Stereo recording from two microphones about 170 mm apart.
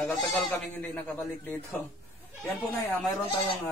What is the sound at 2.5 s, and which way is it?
Speech, centre (ahead or behind).